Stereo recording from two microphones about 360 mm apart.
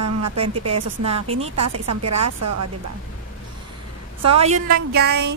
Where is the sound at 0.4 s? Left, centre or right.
Centre.